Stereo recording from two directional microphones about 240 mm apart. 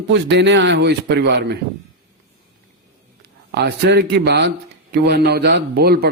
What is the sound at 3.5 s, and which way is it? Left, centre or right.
A man's voice, right.